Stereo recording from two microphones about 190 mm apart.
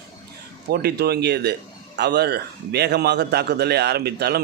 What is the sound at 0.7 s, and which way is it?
A man's voice, 55° right (ahead or behind).